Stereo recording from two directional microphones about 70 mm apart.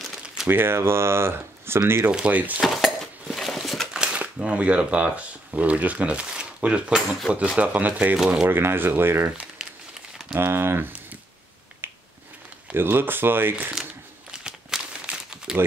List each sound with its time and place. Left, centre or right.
0.2 s a sound: centre
0.5 s speech: right
2.0 s speech: centre
2.6 s a sound: centre
3.9 s speech: centre
8.2 s speech: centre
8.5 s speech: right
9.6 s crumpling: centre
10.3 s speech: right
11.8 s finger snapping: right
12.7 s speech: right
14.4 s crumpling: centre